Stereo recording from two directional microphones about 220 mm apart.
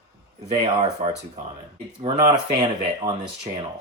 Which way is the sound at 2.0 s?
15° right (ahead or behind).